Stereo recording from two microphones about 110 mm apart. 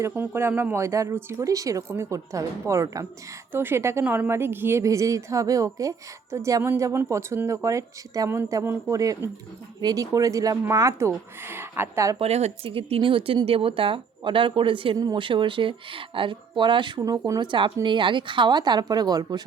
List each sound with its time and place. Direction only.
0.1 s speech: 20° right (ahead or behind)
3.5 s speech: 20° right (ahead or behind)
12.2 s speech: 70° right (ahead or behind); by 14.9 s 50° right (ahead or behind)
14.9 s speech: 40° right (ahead or behind)
17.0 s speech: 35° right (ahead or behind)